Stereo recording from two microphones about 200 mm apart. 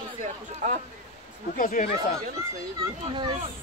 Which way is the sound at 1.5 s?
40° left (ahead or behind).